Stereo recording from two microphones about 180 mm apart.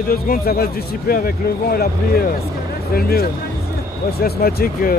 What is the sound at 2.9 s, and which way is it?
Speech, 60° left (ahead or behind).